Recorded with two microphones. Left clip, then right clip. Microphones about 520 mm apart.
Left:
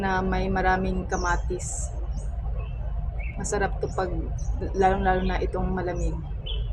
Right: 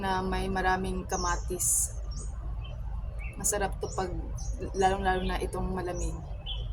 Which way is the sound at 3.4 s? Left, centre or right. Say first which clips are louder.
Left 4 dB; right.